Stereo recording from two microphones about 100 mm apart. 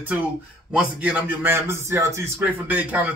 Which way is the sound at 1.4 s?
25° right (ahead or behind).